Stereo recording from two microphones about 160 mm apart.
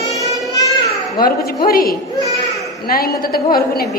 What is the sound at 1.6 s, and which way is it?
A woman's voice, 70° left (ahead or behind).